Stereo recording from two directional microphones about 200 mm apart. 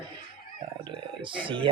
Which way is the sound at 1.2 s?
25° right (ahead or behind).